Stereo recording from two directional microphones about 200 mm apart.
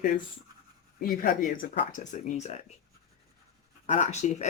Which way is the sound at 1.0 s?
45° left (ahead or behind).